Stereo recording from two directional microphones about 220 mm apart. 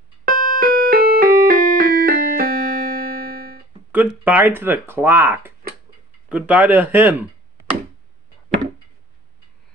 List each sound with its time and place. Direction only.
0.2 s music: 40° right (ahead or behind)
3.9 s speech: 10° right (ahead or behind)